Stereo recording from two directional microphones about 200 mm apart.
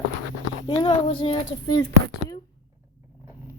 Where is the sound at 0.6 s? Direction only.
20° left (ahead or behind).